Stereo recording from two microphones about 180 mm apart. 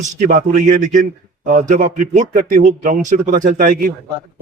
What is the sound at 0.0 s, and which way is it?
A man's voice, 45° right (ahead or behind).